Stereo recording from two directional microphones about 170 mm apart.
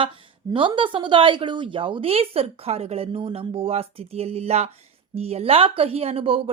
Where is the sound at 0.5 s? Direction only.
30° right (ahead or behind).